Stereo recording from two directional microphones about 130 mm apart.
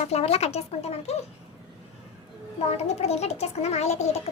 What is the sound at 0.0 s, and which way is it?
Speech, 55° left (ahead or behind).